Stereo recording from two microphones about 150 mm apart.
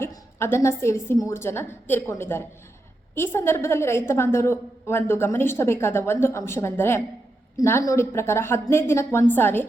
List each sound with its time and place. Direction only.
0.0 s a woman's voice: 15° left (ahead or behind)